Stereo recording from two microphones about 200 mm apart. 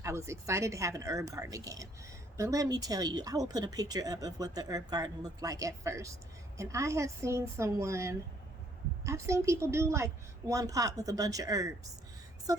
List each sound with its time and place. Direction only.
0.0 s a woman's voice: 15° right (ahead or behind)